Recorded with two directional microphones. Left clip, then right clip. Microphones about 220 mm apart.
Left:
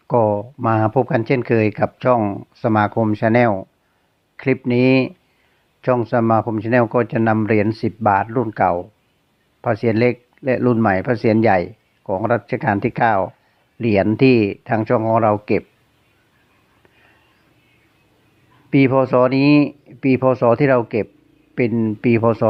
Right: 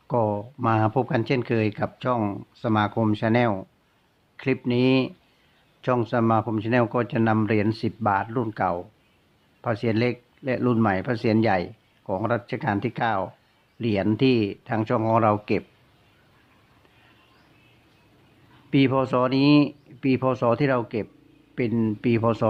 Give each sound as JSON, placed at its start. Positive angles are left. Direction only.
{"t": 0.1, "sound": "speech", "side_deg": 20}
{"t": 18.7, "sound": "speech", "side_deg": 20}